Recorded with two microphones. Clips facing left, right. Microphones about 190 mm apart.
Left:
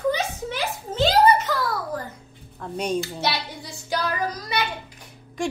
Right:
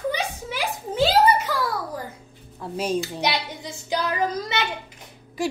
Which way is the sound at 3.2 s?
20° right (ahead or behind).